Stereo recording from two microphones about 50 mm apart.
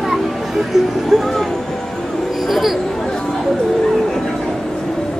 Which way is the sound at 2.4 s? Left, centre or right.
Centre.